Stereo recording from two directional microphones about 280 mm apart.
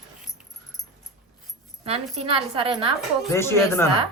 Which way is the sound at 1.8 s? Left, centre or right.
Right.